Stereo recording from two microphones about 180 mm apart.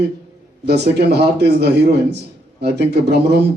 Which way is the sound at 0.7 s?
65° right (ahead or behind).